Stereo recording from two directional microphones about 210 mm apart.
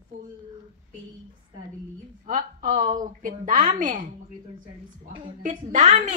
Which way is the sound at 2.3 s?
40° right (ahead or behind).